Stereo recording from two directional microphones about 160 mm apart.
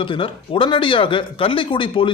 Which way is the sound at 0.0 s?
35° left (ahead or behind).